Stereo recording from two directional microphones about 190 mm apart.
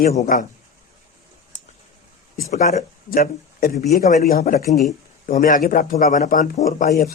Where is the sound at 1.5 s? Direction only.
40° left (ahead or behind).